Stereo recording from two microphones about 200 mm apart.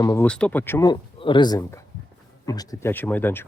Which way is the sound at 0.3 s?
5° left (ahead or behind).